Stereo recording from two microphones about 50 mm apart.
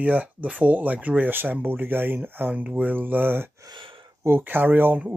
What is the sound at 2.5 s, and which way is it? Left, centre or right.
Speech, right.